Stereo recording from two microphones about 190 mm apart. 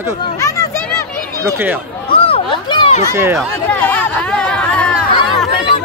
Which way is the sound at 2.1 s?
30° left (ahead or behind).